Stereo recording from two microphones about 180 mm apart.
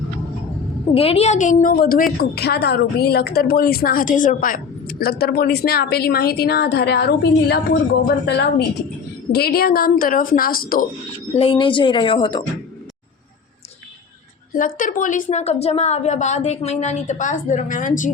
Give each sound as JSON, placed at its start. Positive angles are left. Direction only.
{"t": 0.9, "sound": "a woman's voice", "side_deg": 35}
{"t": 11.3, "sound": "a woman's voice", "side_deg": 30}
{"t": 14.5, "sound": "a woman's voice", "side_deg": 50}